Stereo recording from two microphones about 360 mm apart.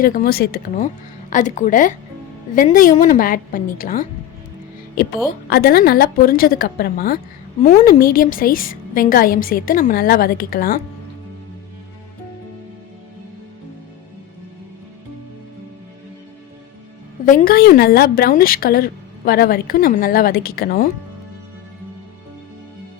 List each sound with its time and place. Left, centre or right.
0.0 s a woman's voice: left
17.2 s a woman's voice: left